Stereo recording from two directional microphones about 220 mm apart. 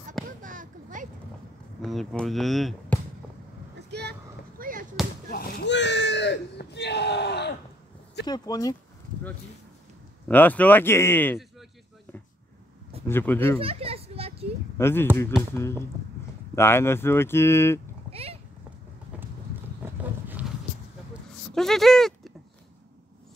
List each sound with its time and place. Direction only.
0.4 s a sound: 35° right (ahead or behind)
1.8 s speech: centre (ahead or behind)
3.7 s vehicle: 50° right (ahead or behind)
5.3 s a sound: 45° left (ahead or behind)
8.3 s speech: 15° left (ahead or behind)
10.2 s speech: 5° left (ahead or behind)
13.0 s speech: 10° left (ahead or behind)
13.6 s children playing: 25° right (ahead or behind)
14.8 s speech: 10° left (ahead or behind)
18.1 s clip-clop: 25° right (ahead or behind)
19.8 s roaring cats: 10° right (ahead or behind)
21.1 s a sound: centre (ahead or behind)